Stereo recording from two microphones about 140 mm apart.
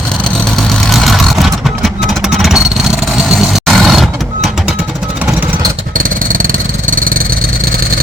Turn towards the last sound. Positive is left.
turn(degrees=-85)